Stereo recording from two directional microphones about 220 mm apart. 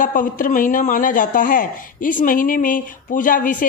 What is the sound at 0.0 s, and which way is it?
Speech, 40° left (ahead or behind).